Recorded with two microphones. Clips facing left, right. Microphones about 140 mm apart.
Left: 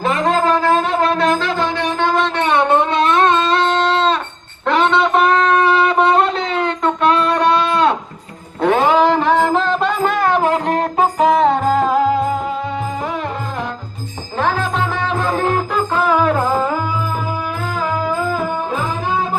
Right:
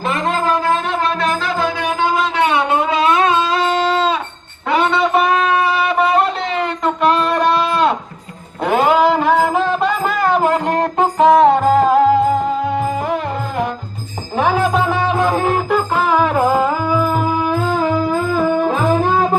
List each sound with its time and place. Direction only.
0.3 s a sound: 35° left (ahead or behind)
1.1 s music: centre (ahead or behind)
4.6 s wind instrument: 5° right (ahead or behind)
8.6 s music: 5° right (ahead or behind)
14.3 s music: 15° right (ahead or behind)